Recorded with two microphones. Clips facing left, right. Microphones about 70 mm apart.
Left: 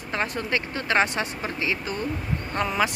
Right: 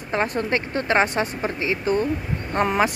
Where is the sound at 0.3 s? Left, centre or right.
Right.